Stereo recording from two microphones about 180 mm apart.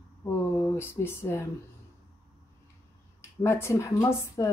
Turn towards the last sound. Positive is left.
turn(degrees=15)  # may be behind; listen again after turning